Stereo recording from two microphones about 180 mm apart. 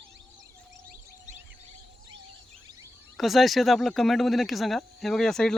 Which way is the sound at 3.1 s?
Centre (ahead or behind).